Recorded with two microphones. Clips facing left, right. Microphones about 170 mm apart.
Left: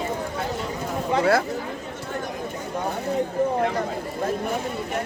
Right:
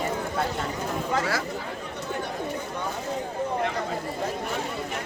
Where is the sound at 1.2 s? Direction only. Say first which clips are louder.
Left 12 dB; 60° left (ahead or behind).